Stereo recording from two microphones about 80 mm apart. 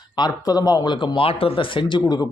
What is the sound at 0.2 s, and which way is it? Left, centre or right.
Speech, left.